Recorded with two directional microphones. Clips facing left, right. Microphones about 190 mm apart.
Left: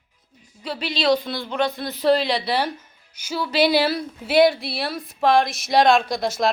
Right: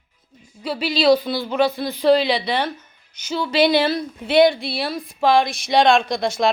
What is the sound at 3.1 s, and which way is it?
Speech, 5° left (ahead or behind).